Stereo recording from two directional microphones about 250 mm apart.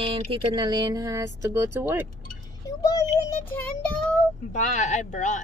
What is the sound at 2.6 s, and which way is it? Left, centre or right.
A child's voice, centre.